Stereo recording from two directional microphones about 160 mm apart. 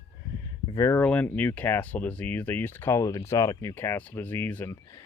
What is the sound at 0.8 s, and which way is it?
Speech, 15° left (ahead or behind).